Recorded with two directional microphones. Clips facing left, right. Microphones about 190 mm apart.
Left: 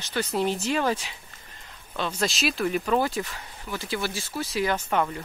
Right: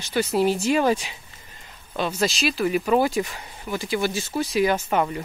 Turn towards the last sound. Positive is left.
turn(degrees=-10)  # may be behind; listen again after turning